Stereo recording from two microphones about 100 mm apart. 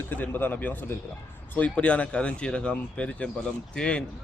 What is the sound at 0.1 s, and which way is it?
Speech, 20° left (ahead or behind).